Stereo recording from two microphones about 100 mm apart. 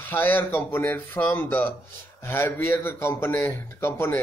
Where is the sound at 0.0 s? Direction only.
20° left (ahead or behind).